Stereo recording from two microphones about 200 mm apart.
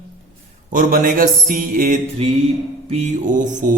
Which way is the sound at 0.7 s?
40° right (ahead or behind).